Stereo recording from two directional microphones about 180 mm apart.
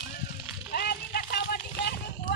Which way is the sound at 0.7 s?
60° left (ahead or behind).